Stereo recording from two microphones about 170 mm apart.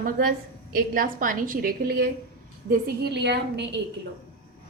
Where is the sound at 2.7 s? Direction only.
75° right (ahead or behind).